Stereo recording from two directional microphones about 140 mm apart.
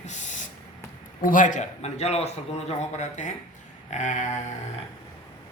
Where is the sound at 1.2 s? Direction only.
75° left (ahead or behind).